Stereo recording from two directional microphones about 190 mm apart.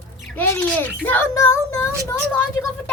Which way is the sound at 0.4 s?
10° left (ahead or behind).